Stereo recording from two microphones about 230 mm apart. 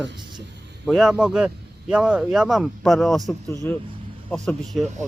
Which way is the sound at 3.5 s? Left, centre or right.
Centre.